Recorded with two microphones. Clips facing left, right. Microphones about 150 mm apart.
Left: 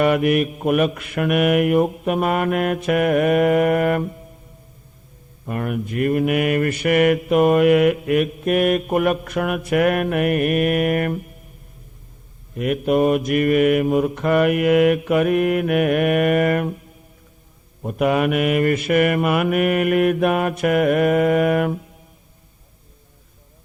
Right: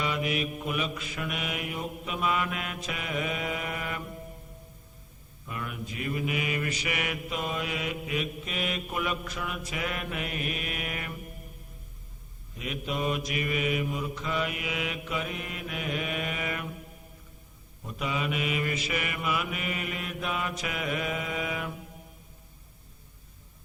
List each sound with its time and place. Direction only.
0.0 s mantra: 60° left (ahead or behind)
5.5 s mantra: 55° left (ahead or behind)
12.5 s mantra: 55° left (ahead or behind)
17.8 s mantra: 60° left (ahead or behind)